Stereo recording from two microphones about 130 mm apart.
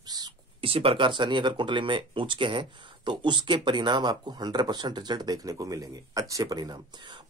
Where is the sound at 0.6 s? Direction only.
45° right (ahead or behind).